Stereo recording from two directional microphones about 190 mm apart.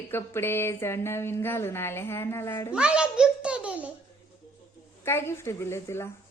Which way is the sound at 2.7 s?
5° right (ahead or behind).